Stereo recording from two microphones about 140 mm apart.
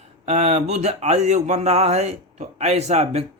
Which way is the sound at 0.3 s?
55° right (ahead or behind).